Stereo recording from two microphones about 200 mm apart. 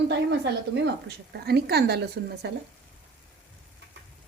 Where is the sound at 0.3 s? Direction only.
60° right (ahead or behind).